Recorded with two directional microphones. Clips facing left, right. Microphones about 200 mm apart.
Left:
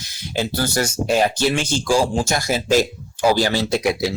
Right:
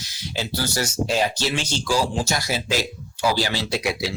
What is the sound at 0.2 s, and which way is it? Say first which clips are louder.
Speech: left 5 dB; 55° left (ahead or behind).